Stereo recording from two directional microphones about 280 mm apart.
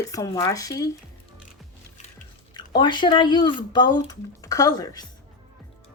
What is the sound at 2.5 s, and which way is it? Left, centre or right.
Speech, centre.